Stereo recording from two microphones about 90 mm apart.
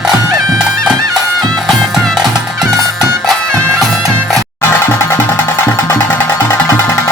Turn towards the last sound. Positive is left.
turn(degrees=25)  # may be behind; listen again after turning